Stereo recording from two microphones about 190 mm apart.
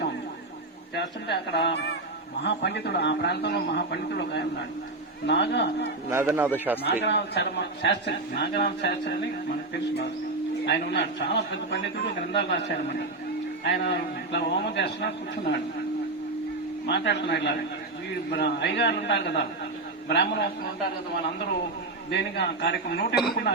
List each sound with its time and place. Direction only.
0.9 s a man's voice: 60° left (ahead or behind)
6.1 s speech: 10° right (ahead or behind)
7.0 s a man's voice: 65° left (ahead or behind)
10.7 s a man's voice: 60° left (ahead or behind)
16.8 s a man's voice: 65° left (ahead or behind)
22.1 s a man's voice: 65° left (ahead or behind)